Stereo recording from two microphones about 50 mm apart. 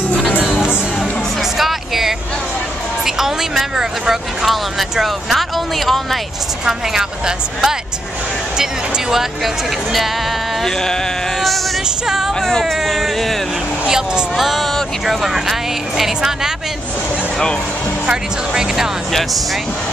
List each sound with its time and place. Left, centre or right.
0.4 s music: centre
1.6 s music: centre
3.2 s speech: centre
6.6 s speech: centre
10.6 s a sound: centre
12.4 s speech: centre
13.8 s speech: centre
18.0 s speech: centre